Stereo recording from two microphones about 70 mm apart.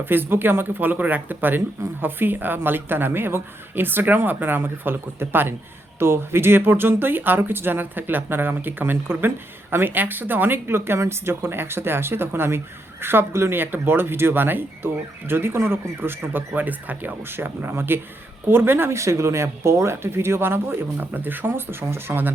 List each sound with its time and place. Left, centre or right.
0.0 s speech: right